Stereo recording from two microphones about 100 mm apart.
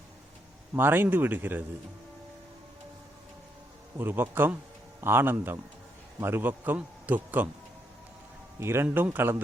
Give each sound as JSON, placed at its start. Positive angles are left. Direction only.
{"t": 0.8, "sound": "a man's voice", "side_deg": -20}
{"t": 3.9, "sound": "a man's voice", "side_deg": -20}
{"t": 8.5, "sound": "a man's voice", "side_deg": -25}